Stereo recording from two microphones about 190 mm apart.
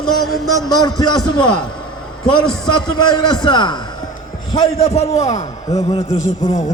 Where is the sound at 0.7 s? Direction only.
20° left (ahead or behind).